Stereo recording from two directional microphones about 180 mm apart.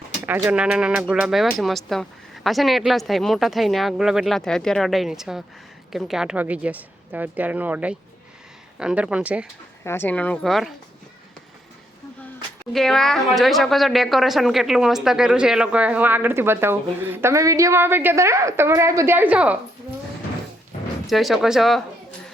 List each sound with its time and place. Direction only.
0.3 s speech: 10° right (ahead or behind)
9.8 s a woman's voice: 10° left (ahead or behind)
12.7 s speech: centre (ahead or behind)
21.1 s speech: centre (ahead or behind)